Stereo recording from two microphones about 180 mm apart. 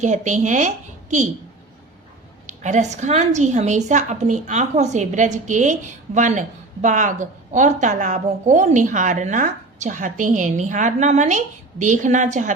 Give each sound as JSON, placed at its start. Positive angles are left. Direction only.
{"t": 0.0, "sound": "a woman's voice", "side_deg": -40}
{"t": 2.5, "sound": "a woman's voice", "side_deg": -40}